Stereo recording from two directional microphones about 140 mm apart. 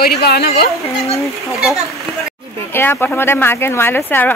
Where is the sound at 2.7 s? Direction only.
15° left (ahead or behind).